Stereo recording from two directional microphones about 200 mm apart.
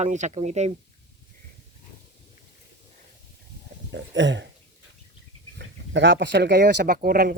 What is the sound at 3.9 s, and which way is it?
Speech, 65° right (ahead or behind).